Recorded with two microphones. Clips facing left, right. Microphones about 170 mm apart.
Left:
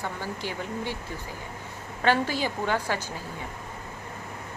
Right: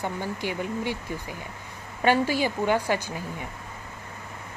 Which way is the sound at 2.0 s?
10° right (ahead or behind).